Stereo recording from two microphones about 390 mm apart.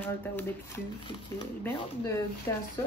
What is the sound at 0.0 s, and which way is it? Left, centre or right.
Speech, centre.